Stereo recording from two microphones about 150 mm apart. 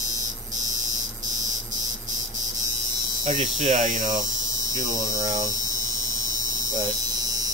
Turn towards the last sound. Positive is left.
turn(degrees=-25)  # may be behind; listen again after turning